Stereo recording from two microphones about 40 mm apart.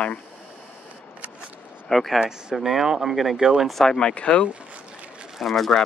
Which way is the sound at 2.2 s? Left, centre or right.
Right.